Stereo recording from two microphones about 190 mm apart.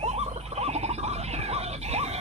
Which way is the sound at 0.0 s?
35° right (ahead or behind).